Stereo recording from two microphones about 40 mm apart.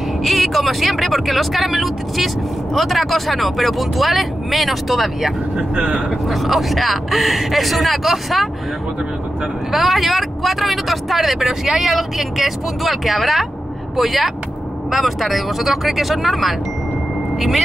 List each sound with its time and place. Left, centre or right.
0.2 s speech: centre
5.6 s speech: right
6.2 s speech: centre
9.7 s speech: centre